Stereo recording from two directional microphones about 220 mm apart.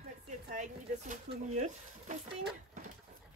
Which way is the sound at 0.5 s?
35° right (ahead or behind).